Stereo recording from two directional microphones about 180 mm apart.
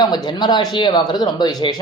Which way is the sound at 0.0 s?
25° left (ahead or behind).